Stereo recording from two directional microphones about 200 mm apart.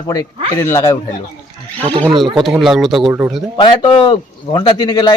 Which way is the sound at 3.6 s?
25° left (ahead or behind).